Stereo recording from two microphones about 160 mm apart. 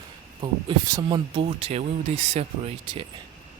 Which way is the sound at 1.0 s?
35° right (ahead or behind).